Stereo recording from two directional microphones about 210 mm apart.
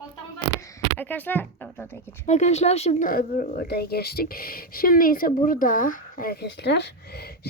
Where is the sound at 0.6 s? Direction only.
10° left (ahead or behind).